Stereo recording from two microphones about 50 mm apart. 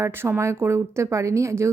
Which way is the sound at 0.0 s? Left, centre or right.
Right.